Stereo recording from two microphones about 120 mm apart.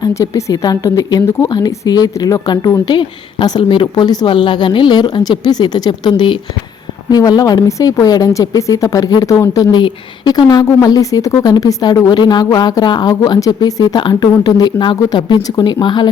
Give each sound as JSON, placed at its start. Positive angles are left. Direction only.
{"t": 0.1, "sound": "speech", "side_deg": 25}